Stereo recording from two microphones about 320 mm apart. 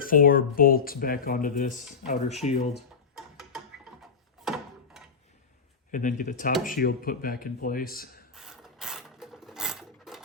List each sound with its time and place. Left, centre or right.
0.0 s speech: left
2.7 s music: centre
4.0 s a sound: centre
5.9 s speech: left
8.3 s mechanisms: centre